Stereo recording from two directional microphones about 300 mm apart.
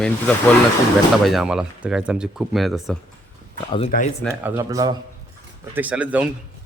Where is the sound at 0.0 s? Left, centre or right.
Centre.